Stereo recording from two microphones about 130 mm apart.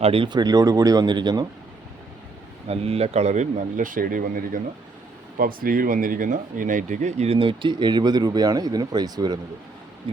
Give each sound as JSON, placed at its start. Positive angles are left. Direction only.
{"t": 0.0, "sound": "speech", "side_deg": -45}
{"t": 0.3, "sound": "speech", "side_deg": -30}
{"t": 2.6, "sound": "speech", "side_deg": -50}